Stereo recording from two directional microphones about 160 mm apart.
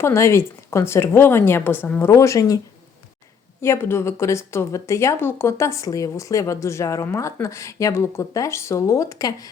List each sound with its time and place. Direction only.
0.0 s a woman's voice: 15° left (ahead or behind)
3.6 s a woman's voice: 15° left (ahead or behind)